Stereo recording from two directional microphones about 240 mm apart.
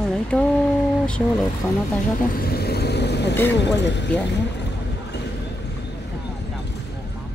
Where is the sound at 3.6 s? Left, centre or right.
Left.